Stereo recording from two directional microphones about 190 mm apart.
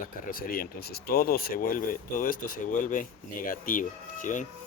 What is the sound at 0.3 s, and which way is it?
Speech, 50° left (ahead or behind).